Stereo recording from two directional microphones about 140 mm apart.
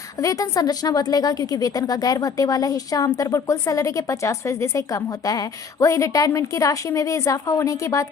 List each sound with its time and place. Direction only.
0.2 s a woman's voice: 25° left (ahead or behind)